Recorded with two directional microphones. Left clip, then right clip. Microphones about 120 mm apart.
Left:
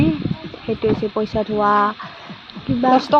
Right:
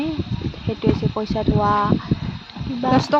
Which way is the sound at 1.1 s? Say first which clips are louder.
Left 2 dB; 20° left (ahead or behind).